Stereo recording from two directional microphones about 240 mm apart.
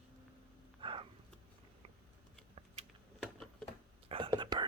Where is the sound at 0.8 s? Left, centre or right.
Right.